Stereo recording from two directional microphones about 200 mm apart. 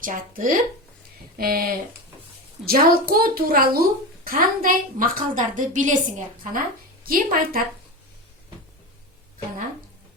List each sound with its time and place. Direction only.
0.0 s a woman's voice: 40° right (ahead or behind)